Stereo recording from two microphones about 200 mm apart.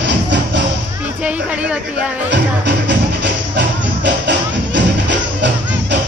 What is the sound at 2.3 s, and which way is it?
Music, 60° right (ahead or behind).